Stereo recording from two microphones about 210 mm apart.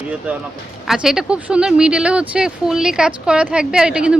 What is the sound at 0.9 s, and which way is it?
Speech, centre (ahead or behind).